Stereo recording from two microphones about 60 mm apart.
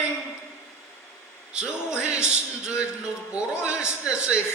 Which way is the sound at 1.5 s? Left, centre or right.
Centre.